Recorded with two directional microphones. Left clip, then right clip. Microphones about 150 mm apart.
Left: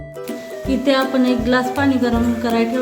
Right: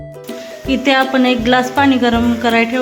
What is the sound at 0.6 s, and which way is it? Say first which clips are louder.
A woman's voice: right 4 dB; 30° right (ahead or behind).